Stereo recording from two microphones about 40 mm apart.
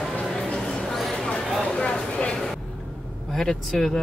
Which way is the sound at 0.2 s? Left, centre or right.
Centre.